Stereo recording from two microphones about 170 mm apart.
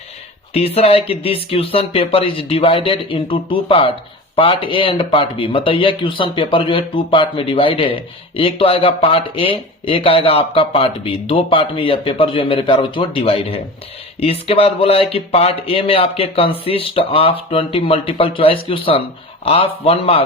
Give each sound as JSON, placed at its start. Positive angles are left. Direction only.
{"t": 0.5, "sound": "speech", "side_deg": 35}